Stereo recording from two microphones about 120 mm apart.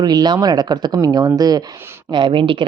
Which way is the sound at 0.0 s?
35° right (ahead or behind).